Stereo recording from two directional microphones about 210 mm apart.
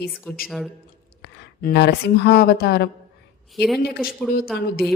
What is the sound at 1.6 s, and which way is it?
A woman's voice, 50° left (ahead or behind).